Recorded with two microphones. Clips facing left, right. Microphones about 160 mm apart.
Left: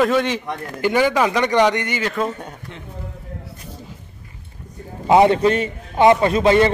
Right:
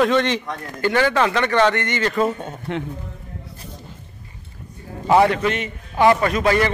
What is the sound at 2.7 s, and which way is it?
Speech, 65° right (ahead or behind).